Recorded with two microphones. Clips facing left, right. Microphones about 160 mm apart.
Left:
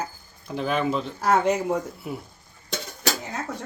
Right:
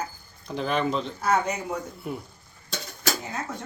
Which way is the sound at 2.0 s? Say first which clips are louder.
Even; 5° left (ahead or behind).